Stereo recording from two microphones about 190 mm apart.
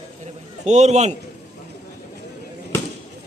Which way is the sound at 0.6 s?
35° right (ahead or behind).